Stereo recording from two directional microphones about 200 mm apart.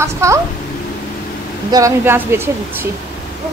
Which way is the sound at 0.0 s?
15° right (ahead or behind).